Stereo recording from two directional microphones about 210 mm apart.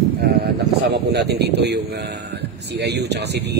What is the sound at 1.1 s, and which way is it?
Speech, 50° right (ahead or behind).